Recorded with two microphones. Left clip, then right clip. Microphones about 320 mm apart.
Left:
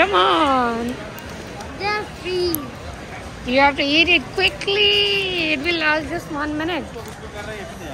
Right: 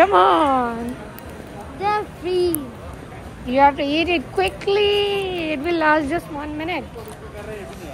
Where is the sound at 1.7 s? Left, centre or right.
Right.